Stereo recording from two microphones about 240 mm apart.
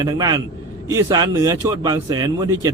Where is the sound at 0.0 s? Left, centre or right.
Centre.